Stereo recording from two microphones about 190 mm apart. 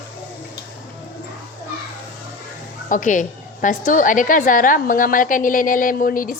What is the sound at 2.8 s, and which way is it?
A woman's voice, 45° left (ahead or behind).